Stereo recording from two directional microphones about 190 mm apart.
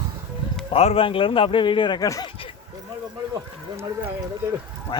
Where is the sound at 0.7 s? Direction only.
30° left (ahead or behind).